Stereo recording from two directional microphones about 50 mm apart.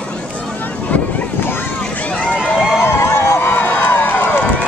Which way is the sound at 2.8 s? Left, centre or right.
Left.